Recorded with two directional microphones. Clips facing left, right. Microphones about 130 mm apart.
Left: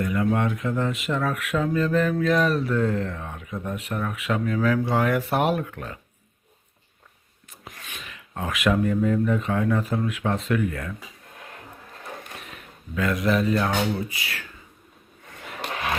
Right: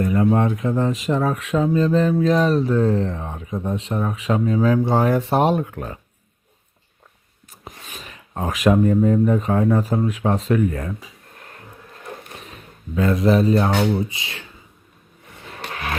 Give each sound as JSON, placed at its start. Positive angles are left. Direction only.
{"t": 0.0, "sound": "speech", "side_deg": -35}
{"t": 7.8, "sound": "speech", "side_deg": -30}
{"t": 12.4, "sound": "speech", "side_deg": -35}